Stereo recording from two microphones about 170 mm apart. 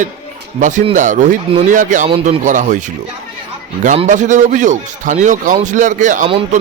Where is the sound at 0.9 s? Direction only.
45° right (ahead or behind).